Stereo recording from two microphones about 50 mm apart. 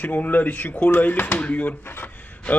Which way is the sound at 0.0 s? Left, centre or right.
Left.